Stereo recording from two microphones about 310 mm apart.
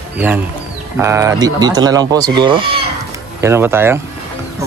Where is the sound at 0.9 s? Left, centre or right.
Centre.